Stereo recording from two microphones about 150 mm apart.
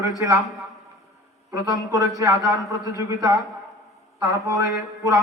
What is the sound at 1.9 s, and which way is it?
A man's voice, 20° right (ahead or behind).